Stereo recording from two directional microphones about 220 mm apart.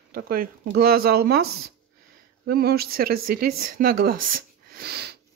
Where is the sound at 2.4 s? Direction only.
45° right (ahead or behind).